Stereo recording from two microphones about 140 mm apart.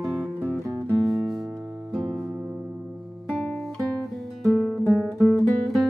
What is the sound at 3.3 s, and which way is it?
Guitar, centre (ahead or behind).